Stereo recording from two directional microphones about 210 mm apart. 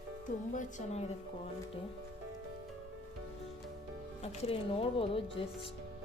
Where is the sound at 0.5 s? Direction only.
35° left (ahead or behind).